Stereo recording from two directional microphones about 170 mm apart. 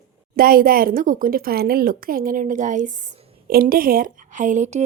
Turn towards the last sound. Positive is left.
turn(degrees=-45)  # may be behind; listen again after turning